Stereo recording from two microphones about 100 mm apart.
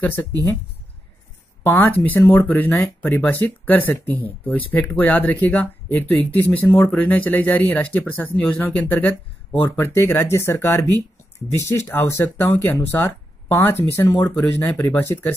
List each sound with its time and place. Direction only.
0.0 s speech: 15° left (ahead or behind)
1.6 s speech: 20° left (ahead or behind)